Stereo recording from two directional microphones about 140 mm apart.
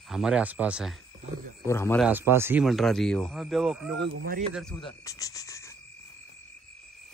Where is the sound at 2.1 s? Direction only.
15° right (ahead or behind).